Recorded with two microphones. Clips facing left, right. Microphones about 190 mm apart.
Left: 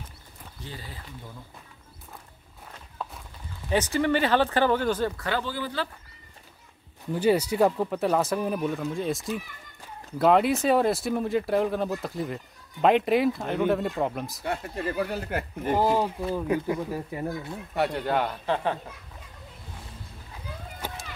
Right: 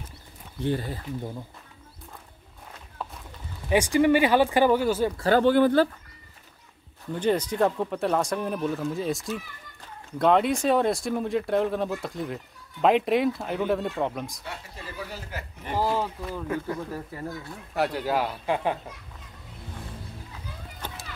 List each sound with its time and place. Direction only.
0.6 s speech: 60° right (ahead or behind)
3.0 s a sound: centre (ahead or behind)
3.7 s speech: 10° right (ahead or behind)
5.4 s speech: 60° right (ahead or behind)
7.1 s speech: 10° left (ahead or behind)
14.4 s speech: 55° left (ahead or behind)
15.7 s speech: 15° left (ahead or behind)
17.7 s speech: centre (ahead or behind)
20.8 s children playing: 10° left (ahead or behind)